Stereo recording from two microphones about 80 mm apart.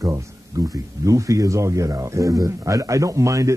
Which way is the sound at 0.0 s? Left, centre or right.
Right.